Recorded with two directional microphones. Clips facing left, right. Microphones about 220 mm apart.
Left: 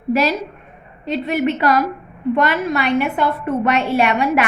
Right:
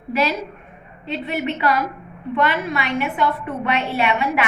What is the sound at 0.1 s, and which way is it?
A woman's voice, 45° left (ahead or behind).